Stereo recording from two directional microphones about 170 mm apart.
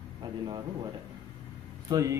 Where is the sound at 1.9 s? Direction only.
20° right (ahead or behind).